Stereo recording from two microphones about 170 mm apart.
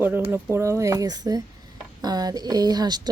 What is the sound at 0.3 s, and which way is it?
Speech, 10° right (ahead or behind).